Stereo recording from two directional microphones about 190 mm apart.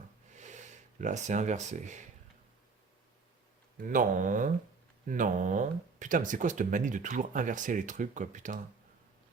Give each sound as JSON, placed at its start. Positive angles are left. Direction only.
{"t": 0.3, "sound": "speech", "side_deg": -40}
{"t": 3.8, "sound": "speech", "side_deg": -45}